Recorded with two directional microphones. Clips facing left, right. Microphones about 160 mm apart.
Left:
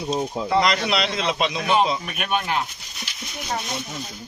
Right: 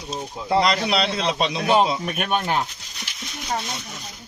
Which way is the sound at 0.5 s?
30° right (ahead or behind).